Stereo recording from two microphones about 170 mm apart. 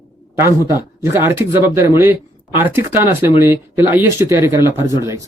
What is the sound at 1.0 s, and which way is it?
Speech, 15° right (ahead or behind).